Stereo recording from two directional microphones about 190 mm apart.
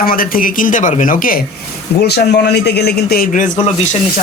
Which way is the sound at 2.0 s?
60° left (ahead or behind).